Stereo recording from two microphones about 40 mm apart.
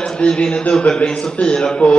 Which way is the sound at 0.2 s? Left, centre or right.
Left.